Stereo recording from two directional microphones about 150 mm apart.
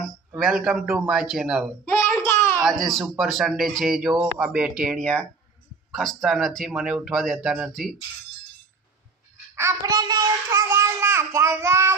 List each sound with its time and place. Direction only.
0.3 s speech: centre (ahead or behind)
1.8 s child singing: 10° left (ahead or behind)
2.6 s speech: centre (ahead or behind)
9.6 s child singing: 20° right (ahead or behind)